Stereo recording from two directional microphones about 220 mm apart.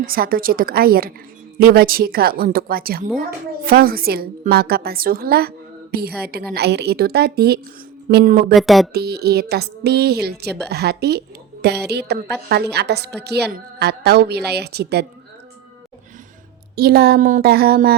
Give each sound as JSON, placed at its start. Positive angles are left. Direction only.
{"t": 0.0, "sound": "a woman's voice", "side_deg": -40}
{"t": 8.5, "sound": "speech", "side_deg": 0}
{"t": 8.9, "sound": "a woman's voice", "side_deg": -45}
{"t": 16.7, "sound": "a woman's voice", "side_deg": -45}